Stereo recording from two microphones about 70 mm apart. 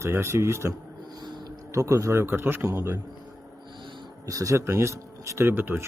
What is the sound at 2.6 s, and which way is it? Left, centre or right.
Speech, right.